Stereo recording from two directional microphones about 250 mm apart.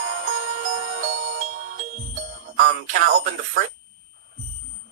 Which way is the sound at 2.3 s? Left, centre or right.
Right.